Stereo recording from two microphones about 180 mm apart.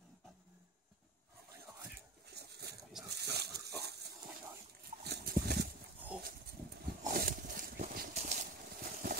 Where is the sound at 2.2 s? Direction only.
65° right (ahead or behind).